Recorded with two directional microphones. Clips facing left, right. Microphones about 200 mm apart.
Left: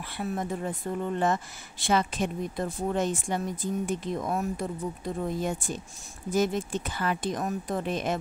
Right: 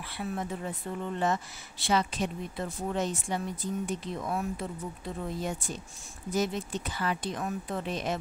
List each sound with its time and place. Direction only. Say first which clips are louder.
0.2 s a woman's voice: left 3 dB; 45° left (ahead or behind)